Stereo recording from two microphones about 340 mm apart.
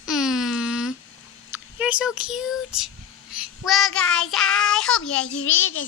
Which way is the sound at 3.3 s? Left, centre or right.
Centre.